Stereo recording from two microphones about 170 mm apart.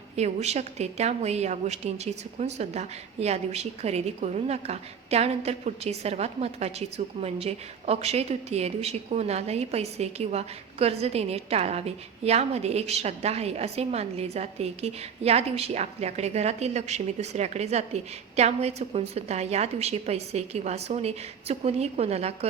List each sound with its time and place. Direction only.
0.2 s a woman's voice: 40° right (ahead or behind)